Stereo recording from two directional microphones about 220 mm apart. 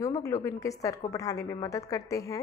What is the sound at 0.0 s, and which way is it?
A woman's voice, 15° left (ahead or behind).